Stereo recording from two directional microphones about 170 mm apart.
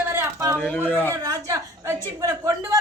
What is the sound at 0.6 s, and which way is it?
Speech, 10° left (ahead or behind).